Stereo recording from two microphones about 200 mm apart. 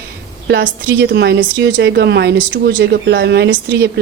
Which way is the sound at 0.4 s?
60° right (ahead or behind).